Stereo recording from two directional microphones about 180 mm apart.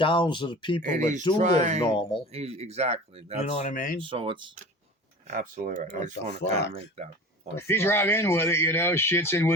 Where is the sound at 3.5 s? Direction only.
45° left (ahead or behind).